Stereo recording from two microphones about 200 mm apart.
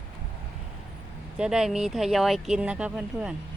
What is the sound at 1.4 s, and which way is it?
Speech, 5° right (ahead or behind).